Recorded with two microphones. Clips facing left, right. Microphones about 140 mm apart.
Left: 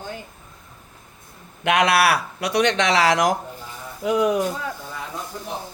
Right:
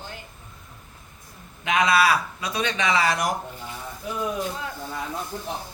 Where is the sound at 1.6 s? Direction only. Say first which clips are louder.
Left 2 dB; 75° left (ahead or behind); by 4.4 s 90° left.